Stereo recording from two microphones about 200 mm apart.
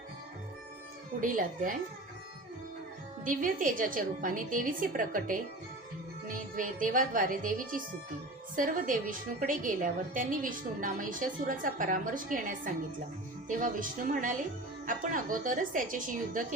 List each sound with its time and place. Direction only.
1.2 s a woman's voice: 40° right (ahead or behind)
3.2 s a woman's voice: 40° right (ahead or behind)